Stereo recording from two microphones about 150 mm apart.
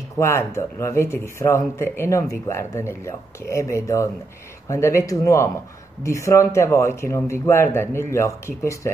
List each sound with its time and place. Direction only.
0.2 s speech: 15° left (ahead or behind)